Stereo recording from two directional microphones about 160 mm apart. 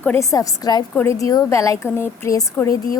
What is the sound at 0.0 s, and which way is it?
A woman's voice, 15° left (ahead or behind).